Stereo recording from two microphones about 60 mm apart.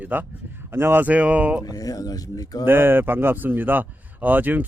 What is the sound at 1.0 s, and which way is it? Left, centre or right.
Speech, right.